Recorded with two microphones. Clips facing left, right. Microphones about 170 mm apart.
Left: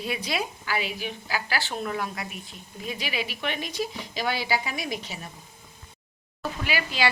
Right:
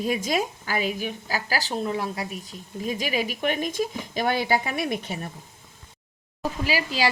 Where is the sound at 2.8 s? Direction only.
45° right (ahead or behind).